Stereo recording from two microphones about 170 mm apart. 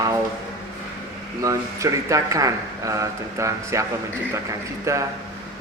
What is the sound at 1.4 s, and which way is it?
Speech, 20° right (ahead or behind).